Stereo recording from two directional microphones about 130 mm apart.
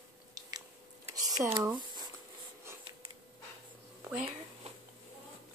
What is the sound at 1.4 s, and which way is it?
Speech, 15° right (ahead or behind).